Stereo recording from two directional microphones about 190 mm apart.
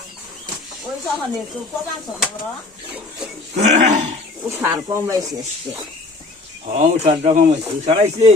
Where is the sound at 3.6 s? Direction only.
35° right (ahead or behind).